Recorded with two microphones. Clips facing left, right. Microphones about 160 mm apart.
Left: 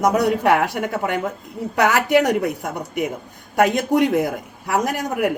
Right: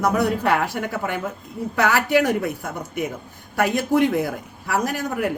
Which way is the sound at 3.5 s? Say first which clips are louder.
Left 2 dB; 20° left (ahead or behind).